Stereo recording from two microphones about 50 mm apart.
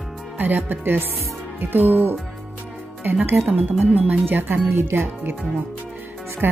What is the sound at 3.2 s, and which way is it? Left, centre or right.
Speech, right.